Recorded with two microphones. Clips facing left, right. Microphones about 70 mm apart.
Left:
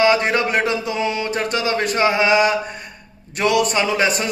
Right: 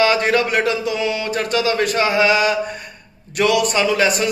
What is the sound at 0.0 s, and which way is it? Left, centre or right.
A man's voice, centre.